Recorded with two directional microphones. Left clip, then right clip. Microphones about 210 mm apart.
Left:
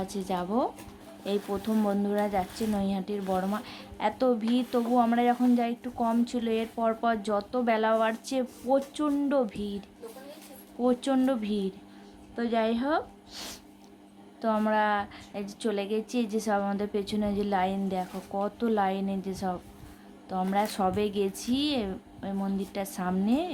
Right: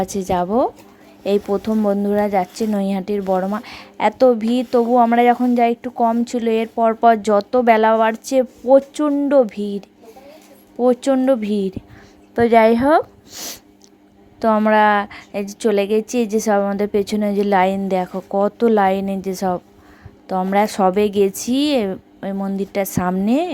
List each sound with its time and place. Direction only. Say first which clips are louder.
0.0 s speech: right 13 dB; 35° right (ahead or behind)